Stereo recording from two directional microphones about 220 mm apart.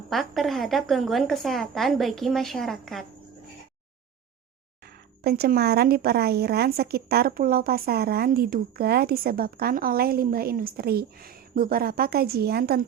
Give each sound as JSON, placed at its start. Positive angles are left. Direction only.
{"t": 0.1, "sound": "a woman's voice", "side_deg": 0}
{"t": 5.2, "sound": "a woman's voice", "side_deg": -45}